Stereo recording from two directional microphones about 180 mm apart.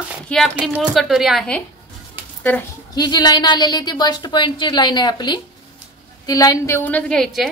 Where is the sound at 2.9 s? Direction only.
20° left (ahead or behind).